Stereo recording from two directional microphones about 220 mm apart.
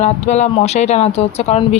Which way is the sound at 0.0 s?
30° left (ahead or behind).